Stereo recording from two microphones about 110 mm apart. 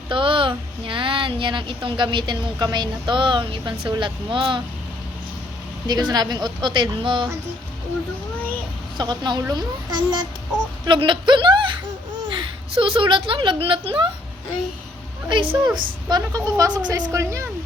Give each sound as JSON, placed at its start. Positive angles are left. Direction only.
{"t": 0.1, "sound": "a woman's voice", "side_deg": -50}
{"t": 5.9, "sound": "a woman's voice", "side_deg": -40}
{"t": 9.0, "sound": "a woman's voice", "side_deg": -40}
{"t": 15.3, "sound": "a woman's voice", "side_deg": -55}
{"t": 15.6, "sound": "speech", "side_deg": -40}